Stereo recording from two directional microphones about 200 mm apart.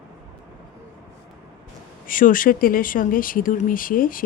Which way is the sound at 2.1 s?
40° left (ahead or behind).